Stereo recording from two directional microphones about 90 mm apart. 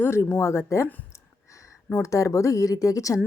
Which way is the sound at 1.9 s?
35° left (ahead or behind).